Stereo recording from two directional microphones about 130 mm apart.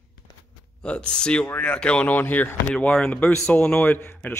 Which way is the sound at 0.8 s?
10° left (ahead or behind).